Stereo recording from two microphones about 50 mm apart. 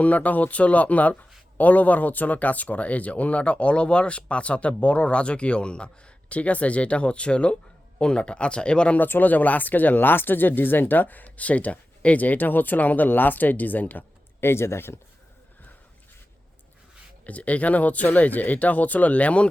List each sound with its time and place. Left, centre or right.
0.0 s speech: left
9.0 s speech: left
14.4 s speech: left
17.2 s speech: left